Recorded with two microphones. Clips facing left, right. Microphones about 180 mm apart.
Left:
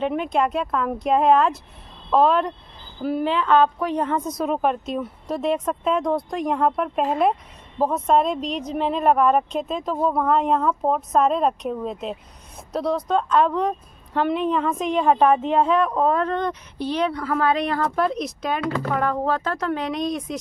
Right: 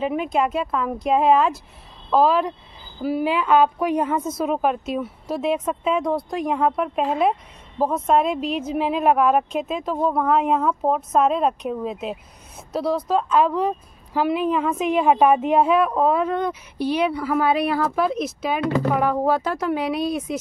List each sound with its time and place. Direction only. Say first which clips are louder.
0.0 s a woman's voice: even; centre (ahead or behind)
18.6 s speech: right 7 dB; 20° right (ahead or behind)
18.9 s a woman's voice: right 3 dB; 10° right (ahead or behind)